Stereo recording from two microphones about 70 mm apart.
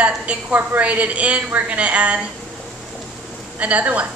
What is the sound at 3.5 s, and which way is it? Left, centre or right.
Speech, centre.